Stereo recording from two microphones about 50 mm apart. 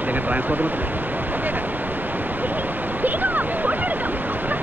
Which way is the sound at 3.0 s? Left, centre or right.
Right.